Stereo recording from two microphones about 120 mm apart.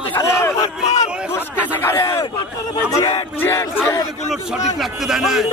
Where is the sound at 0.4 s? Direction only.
25° left (ahead or behind).